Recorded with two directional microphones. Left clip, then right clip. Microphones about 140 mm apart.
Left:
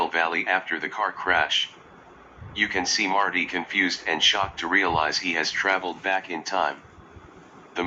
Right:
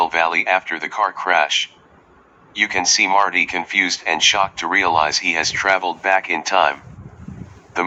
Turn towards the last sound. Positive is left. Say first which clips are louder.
# right 8 dB
turn(degrees=-35)  # may be behind; listen again after turning